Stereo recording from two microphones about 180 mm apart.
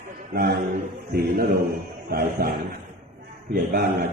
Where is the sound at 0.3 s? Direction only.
60° right (ahead or behind).